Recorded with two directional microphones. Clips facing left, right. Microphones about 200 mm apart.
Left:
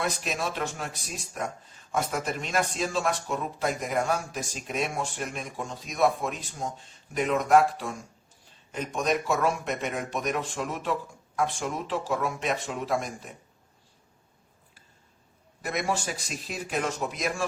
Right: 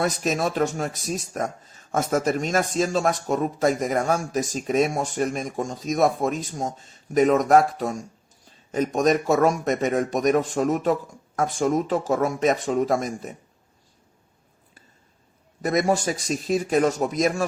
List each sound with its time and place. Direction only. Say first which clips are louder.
0.0 s speech: right 7 dB; 40° right (ahead or behind)
15.6 s speech: right 8 dB; 40° right (ahead or behind)